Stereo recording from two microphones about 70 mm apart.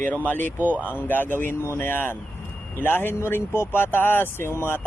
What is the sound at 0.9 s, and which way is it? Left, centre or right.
Speech, left.